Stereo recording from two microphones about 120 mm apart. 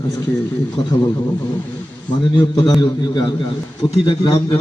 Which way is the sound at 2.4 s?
35° left (ahead or behind).